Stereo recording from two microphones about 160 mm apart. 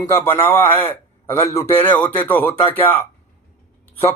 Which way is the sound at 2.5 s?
35° left (ahead or behind).